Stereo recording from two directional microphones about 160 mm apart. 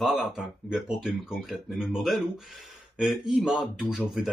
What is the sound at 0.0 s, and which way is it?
Speech, 5° right (ahead or behind).